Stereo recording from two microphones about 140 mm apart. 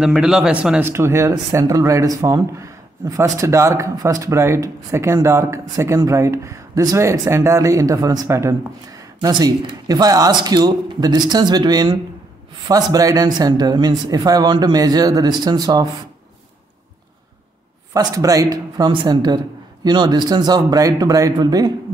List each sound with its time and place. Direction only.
0.0 s speech: 5° right (ahead or behind); by 15.9 s 25° right (ahead or behind)
17.9 s speech: 25° right (ahead or behind)